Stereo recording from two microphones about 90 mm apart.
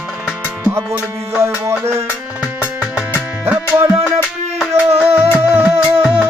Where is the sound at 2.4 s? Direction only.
5° right (ahead or behind).